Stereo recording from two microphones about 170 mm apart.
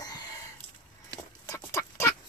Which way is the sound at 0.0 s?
25° left (ahead or behind).